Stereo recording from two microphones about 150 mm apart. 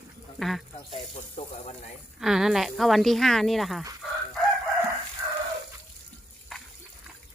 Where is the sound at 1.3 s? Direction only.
50° left (ahead or behind).